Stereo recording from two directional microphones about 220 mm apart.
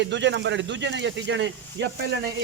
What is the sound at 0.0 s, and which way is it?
Speech, 55° right (ahead or behind).